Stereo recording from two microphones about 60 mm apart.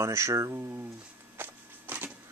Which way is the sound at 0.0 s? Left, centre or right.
Right.